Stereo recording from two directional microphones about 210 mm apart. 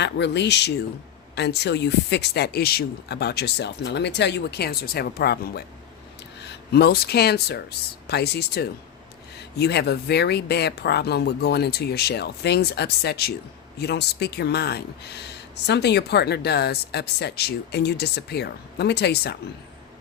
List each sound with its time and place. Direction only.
0.0 s speech: 55° left (ahead or behind)